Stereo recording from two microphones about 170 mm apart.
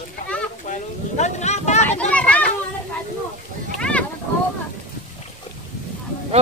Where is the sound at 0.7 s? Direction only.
45° left (ahead or behind).